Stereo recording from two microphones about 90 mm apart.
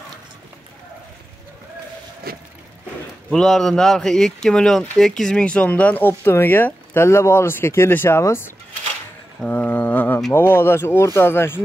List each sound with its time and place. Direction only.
3.3 s a man's voice: 5° left (ahead or behind); by 8.5 s 30° left (ahead or behind)
9.5 s a sound: 20° left (ahead or behind)
10.3 s speech: 25° left (ahead or behind)